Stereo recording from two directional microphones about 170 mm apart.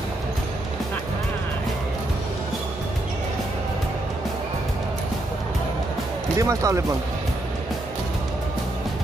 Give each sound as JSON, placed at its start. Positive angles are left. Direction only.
{"t": 6.3, "sound": "speech", "side_deg": -20}